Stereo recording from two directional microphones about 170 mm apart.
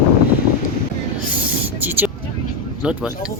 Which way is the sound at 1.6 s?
10° right (ahead or behind).